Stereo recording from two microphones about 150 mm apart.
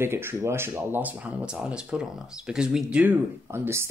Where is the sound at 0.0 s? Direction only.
15° right (ahead or behind).